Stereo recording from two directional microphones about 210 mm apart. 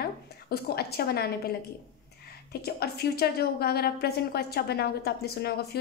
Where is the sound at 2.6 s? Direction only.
50° left (ahead or behind).